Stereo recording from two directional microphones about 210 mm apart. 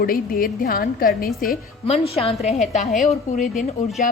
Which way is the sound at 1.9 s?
30° left (ahead or behind).